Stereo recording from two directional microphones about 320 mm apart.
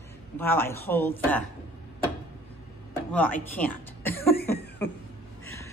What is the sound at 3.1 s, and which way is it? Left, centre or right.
A man's voice, centre.